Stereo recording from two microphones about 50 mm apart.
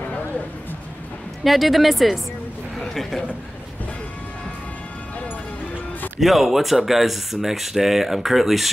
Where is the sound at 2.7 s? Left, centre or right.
Centre.